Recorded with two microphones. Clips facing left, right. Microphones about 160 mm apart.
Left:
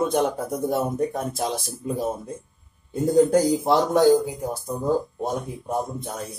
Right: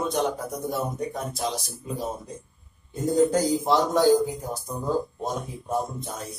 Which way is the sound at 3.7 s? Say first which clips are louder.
Left 2 dB; 55° left (ahead or behind).